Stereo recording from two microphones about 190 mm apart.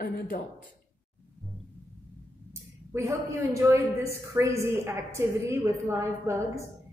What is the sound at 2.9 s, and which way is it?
A woman's voice, 15° right (ahead or behind).